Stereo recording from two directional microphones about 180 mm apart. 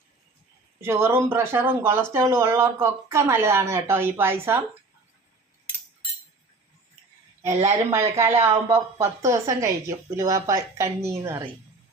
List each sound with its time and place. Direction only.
0.8 s speech: 15° right (ahead or behind)
7.5 s speech: 40° right (ahead or behind)
7.9 s speech: 15° right (ahead or behind)